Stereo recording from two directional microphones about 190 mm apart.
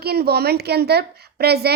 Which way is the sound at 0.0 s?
55° right (ahead or behind).